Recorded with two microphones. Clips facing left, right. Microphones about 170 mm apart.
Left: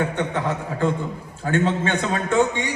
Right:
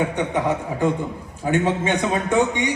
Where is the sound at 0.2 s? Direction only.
15° right (ahead or behind).